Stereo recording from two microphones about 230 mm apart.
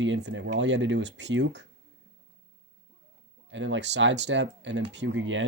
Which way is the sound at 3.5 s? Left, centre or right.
Right.